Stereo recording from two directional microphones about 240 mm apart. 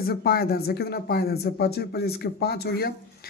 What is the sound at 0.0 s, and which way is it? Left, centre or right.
Speech, left.